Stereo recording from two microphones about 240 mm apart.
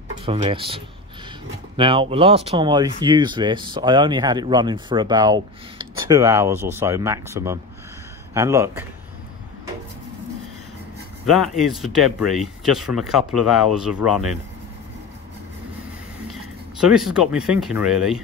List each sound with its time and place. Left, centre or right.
0.2 s speech: right
11.2 s speech: centre
16.3 s speech: centre